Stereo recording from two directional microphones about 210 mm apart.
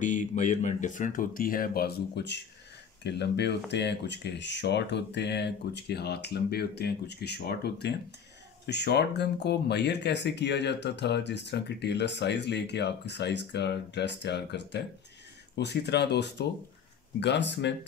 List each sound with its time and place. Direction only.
0.0 s speech: 35° left (ahead or behind); by 17.7 s 55° left (ahead or behind)